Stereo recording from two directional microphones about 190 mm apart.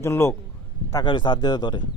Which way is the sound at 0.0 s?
15° left (ahead or behind).